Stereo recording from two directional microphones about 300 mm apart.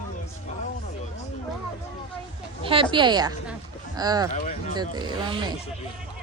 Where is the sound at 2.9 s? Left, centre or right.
Centre.